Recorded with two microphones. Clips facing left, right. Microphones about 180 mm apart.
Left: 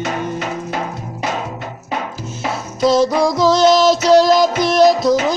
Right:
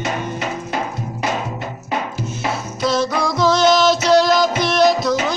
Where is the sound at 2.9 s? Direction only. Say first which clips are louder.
Left 6 dB; 40° left (ahead or behind).